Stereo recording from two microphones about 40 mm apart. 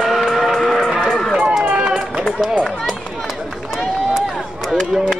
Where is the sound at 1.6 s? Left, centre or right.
Right.